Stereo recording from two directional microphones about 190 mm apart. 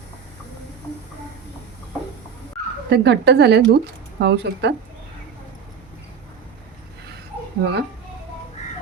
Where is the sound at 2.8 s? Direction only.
65° right (ahead or behind).